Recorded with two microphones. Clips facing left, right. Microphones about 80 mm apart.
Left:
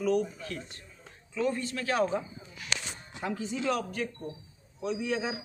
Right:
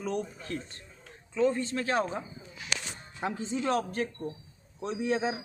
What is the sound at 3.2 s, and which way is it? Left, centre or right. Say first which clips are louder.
A man's voice: right 1 dB; right.